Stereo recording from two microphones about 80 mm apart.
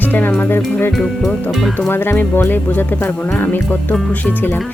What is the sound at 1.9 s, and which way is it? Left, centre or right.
Speech, left.